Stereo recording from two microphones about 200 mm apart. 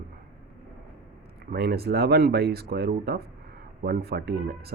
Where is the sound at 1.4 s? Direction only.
50° right (ahead or behind).